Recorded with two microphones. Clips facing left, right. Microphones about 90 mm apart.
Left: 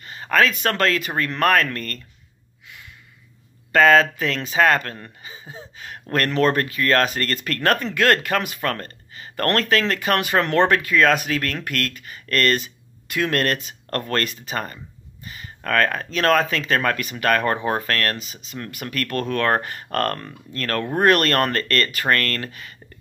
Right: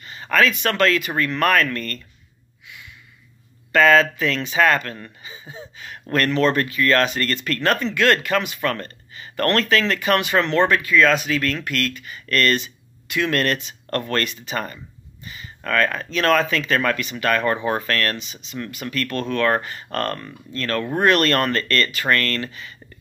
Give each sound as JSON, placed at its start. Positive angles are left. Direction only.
{"t": 0.0, "sound": "speech", "side_deg": 40}
{"t": 3.7, "sound": "speech", "side_deg": 40}
{"t": 17.6, "sound": "speech", "side_deg": 40}